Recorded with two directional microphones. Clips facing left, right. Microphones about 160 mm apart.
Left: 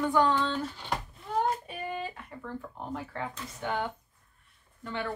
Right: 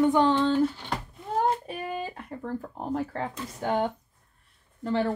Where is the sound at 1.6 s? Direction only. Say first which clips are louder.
Right 3 dB; 40° right (ahead or behind).